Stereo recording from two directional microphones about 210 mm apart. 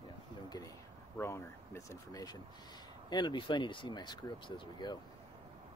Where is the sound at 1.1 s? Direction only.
10° left (ahead or behind).